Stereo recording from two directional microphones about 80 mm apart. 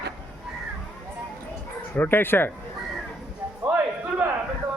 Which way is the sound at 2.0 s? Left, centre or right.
Left.